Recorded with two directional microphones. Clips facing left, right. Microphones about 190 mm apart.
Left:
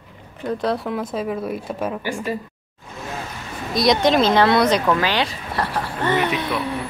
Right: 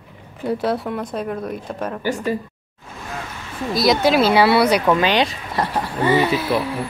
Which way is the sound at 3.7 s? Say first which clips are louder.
Even; 5° right (ahead or behind).